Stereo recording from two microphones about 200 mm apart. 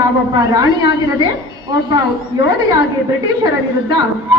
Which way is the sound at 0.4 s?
20° right (ahead or behind).